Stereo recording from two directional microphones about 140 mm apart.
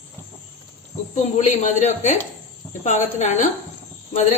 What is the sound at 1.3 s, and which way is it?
A woman's voice, 60° left (ahead or behind).